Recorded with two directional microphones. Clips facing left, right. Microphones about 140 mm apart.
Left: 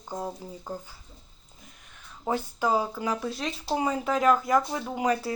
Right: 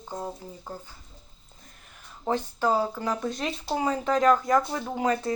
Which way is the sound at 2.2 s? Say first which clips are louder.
Right 1 dB; 10° left (ahead or behind).